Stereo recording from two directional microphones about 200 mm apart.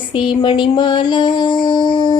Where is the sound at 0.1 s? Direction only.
25° left (ahead or behind).